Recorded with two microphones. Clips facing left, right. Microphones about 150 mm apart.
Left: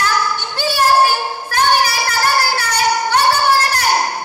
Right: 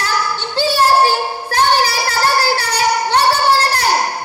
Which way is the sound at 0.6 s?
30° right (ahead or behind).